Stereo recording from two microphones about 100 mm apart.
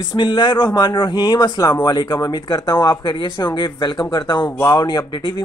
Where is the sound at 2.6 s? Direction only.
25° left (ahead or behind).